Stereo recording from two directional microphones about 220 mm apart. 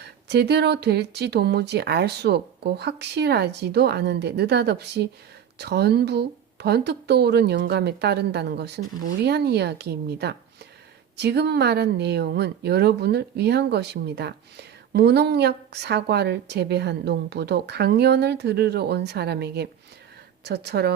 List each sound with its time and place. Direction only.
0.0 s speech: 50° right (ahead or behind)